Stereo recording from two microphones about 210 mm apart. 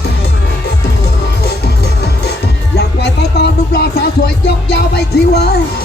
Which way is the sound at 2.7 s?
50° left (ahead or behind).